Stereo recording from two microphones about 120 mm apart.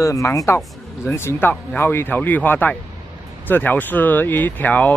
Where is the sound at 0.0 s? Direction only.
25° left (ahead or behind).